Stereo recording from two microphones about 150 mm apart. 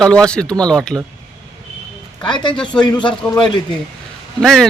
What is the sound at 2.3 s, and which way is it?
Speech, 30° left (ahead or behind).